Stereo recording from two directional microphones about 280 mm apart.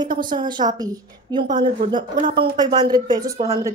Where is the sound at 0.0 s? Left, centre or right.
Centre.